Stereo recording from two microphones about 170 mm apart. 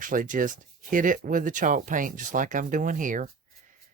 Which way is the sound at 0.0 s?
50° right (ahead or behind).